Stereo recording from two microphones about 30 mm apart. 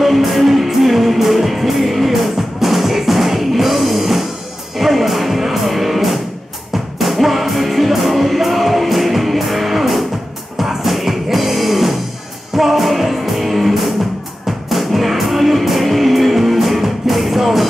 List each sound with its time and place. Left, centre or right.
0.0 s music: centre